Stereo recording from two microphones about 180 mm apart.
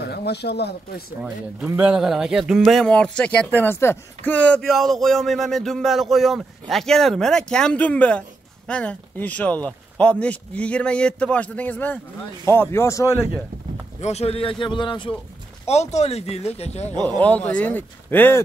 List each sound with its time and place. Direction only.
0.0 s speech: 65° left (ahead or behind)
1.2 s speech: 5° right (ahead or behind); by 13.1 s 15° left (ahead or behind)
14.0 s a man's voice: 35° left (ahead or behind)
15.6 s speech: 40° left (ahead or behind)
17.2 s speech: 5° left (ahead or behind)